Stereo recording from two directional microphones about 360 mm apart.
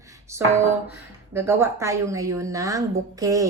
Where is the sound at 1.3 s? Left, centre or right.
Centre.